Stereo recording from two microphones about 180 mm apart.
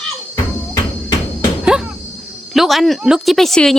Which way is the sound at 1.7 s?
5° right (ahead or behind).